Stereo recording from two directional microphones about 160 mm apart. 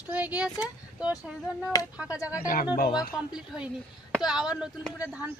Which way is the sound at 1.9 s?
5° right (ahead or behind).